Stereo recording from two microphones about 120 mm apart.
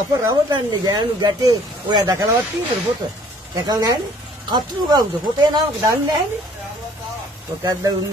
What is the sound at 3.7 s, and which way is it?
Speech, 30° right (ahead or behind).